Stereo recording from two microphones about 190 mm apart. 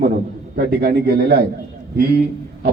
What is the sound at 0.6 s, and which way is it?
Speech, 55° right (ahead or behind).